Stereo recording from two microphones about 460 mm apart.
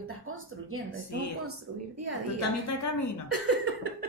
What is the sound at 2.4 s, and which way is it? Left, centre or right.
Speech, left.